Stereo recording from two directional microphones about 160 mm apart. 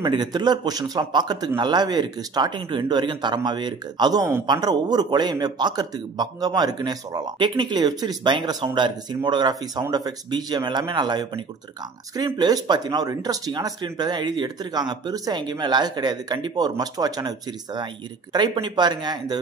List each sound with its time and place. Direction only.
0.0 s speech: 25° right (ahead or behind)